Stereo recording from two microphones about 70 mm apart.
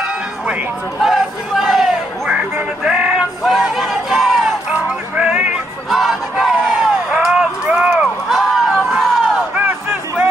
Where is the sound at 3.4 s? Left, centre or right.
Centre.